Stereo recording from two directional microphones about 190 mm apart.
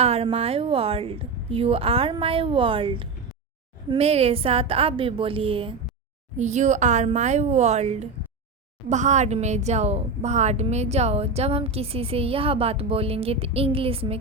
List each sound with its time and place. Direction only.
0.0 s a woman's voice: 30° right (ahead or behind)